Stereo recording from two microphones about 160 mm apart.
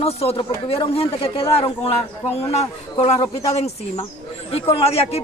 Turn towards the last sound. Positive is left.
turn(degrees=40)  # may be behind; listen again after turning